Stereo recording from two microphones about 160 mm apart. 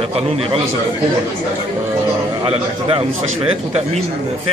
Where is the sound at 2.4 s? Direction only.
35° right (ahead or behind).